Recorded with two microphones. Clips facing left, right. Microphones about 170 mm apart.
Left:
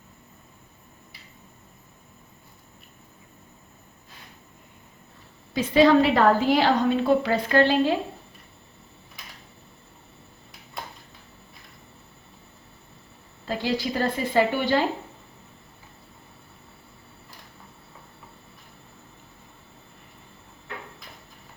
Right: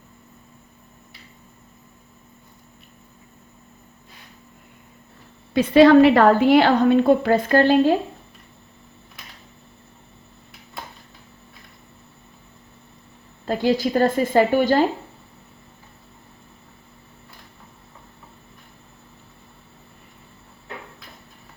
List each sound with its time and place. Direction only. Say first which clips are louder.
5.5 s a woman's voice: right 6 dB; 65° right (ahead or behind); by 7.9 s 45° right (ahead or behind)
13.4 s a woman's voice: right 7 dB; 50° right (ahead or behind)